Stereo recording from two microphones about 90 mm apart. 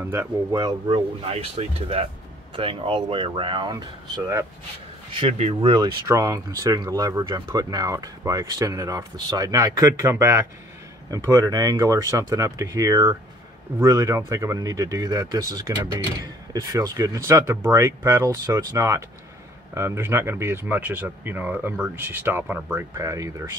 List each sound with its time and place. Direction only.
0.0 s speech: 30° right (ahead or behind)
0.8 s speech: 90° right
2.5 s speech: 75° right (ahead or behind)
5.1 s speech: 85° right
6.0 s speech: 40° right (ahead or behind); by 22.8 s 20° right (ahead or behind)
22.9 s speech: 40° right (ahead or behind)